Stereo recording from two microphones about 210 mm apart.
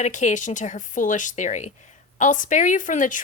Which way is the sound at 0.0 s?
35° left (ahead or behind).